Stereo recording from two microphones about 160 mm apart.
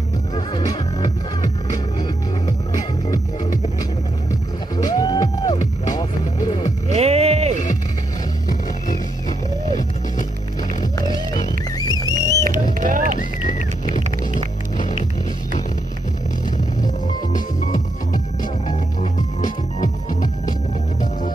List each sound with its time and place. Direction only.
0.7 s music: 25° left (ahead or behind)
4.7 s music: 25° left (ahead or behind)
6.9 s music: 40° right (ahead or behind)
11.8 s music: 25° left (ahead or behind)
12.7 s run: 60° right (ahead or behind)
13.5 s music: 50° left (ahead or behind)
17.6 s music: 55° left (ahead or behind)